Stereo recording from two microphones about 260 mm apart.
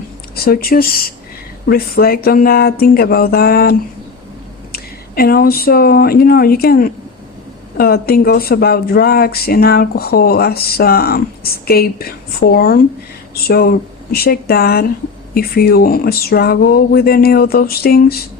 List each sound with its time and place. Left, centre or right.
0.3 s speech: left